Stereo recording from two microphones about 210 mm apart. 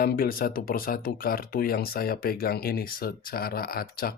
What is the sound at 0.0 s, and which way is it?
Speech, 45° left (ahead or behind).